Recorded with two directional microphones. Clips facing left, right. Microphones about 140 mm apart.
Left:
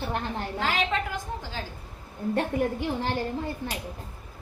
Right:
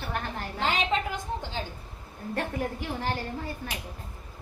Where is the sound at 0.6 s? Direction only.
20° right (ahead or behind).